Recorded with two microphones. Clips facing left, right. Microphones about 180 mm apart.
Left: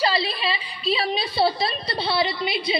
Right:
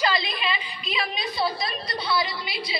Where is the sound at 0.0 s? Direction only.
35° left (ahead or behind).